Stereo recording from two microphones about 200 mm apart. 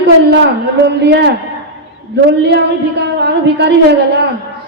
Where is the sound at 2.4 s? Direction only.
60° right (ahead or behind).